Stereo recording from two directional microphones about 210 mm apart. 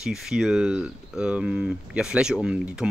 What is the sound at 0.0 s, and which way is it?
Speech, centre (ahead or behind).